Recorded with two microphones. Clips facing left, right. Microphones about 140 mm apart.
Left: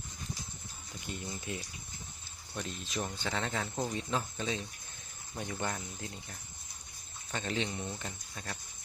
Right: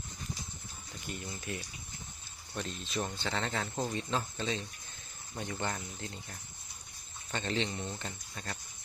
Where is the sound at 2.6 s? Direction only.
10° left (ahead or behind).